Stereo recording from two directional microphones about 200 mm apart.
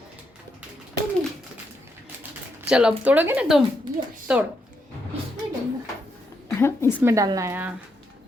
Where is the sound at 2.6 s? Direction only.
5° right (ahead or behind).